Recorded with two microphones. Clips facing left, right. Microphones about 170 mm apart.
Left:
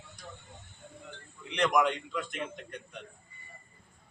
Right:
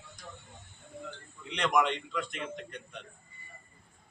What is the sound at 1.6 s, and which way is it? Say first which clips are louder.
Speech: left 1 dB; 5° left (ahead or behind).